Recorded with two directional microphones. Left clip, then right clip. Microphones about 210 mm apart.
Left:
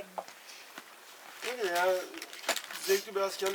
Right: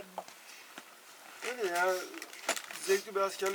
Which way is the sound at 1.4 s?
5° left (ahead or behind).